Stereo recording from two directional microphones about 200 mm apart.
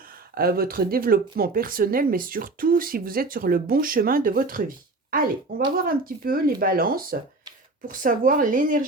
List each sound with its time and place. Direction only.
0.3 s speech: 50° right (ahead or behind)
5.7 s speech: 45° right (ahead or behind)